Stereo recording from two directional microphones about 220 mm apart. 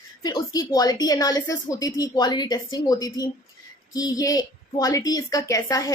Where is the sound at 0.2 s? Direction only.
20° left (ahead or behind).